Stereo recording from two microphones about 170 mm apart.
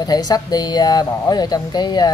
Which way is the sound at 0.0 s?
25° left (ahead or behind).